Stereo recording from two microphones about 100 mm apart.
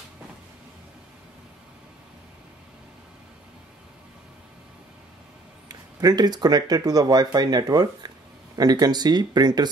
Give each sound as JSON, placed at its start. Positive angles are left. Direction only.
{"t": 5.7, "sound": "speech", "side_deg": -40}